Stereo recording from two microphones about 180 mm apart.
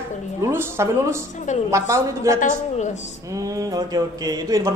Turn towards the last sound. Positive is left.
turn(degrees=-15)  # may be behind; listen again after turning